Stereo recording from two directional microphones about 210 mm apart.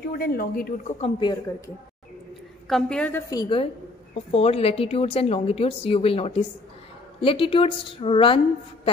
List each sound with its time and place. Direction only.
0.1 s speech: 45° left (ahead or behind)
1.0 s a woman's voice: 20° left (ahead or behind)
2.7 s a woman's voice: 5° left (ahead or behind)
3.3 s a woman's voice: 20° left (ahead or behind)